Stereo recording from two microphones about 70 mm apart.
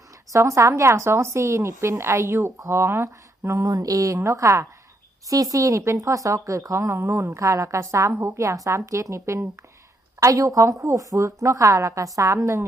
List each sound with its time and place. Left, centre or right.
0.3 s speech: right